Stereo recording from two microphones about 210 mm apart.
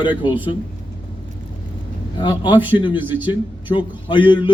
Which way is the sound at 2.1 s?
20° left (ahead or behind).